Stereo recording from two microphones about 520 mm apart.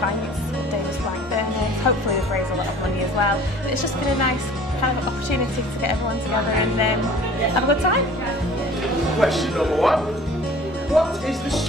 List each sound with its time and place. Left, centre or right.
1.8 s music: left
3.2 s a woman's voice: left
7.6 s a woman's voice: left
9.2 s speech: centre